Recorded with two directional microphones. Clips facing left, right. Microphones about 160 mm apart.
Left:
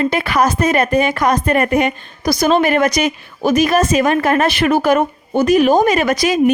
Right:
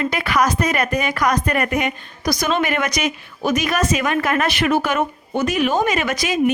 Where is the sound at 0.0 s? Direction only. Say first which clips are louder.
Left 4 dB; 30° left (ahead or behind).